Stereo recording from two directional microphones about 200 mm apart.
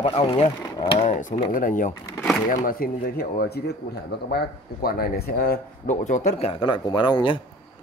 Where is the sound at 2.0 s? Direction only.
15° left (ahead or behind).